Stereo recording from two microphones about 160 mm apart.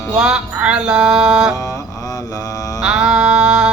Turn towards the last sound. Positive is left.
turn(degrees=-5)  # may be behind; listen again after turning